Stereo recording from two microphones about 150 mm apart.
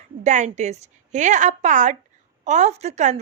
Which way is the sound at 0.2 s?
55° right (ahead or behind).